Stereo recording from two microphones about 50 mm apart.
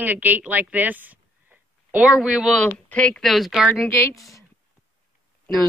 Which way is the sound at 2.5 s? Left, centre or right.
Left.